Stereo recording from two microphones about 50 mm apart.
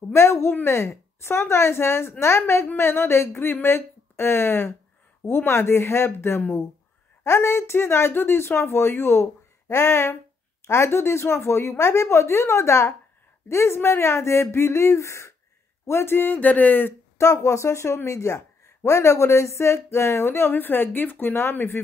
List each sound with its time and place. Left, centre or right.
0.1 s speech: left
2.6 s speech: left
7.2 s speech: left
15.9 s speech: left
16.3 s speech: left
17.2 s a woman's voice: left
20.5 s speech: left